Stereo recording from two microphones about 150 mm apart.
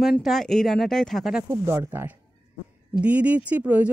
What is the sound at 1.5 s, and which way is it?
Speech, 15° right (ahead or behind).